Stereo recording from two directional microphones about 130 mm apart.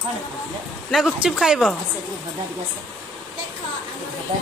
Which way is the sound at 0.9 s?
Centre (ahead or behind).